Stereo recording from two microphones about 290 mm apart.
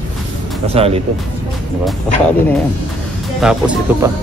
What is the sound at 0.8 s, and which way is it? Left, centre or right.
Speech, right.